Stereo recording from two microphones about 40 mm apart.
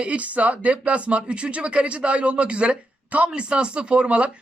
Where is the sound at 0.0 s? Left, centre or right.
Right.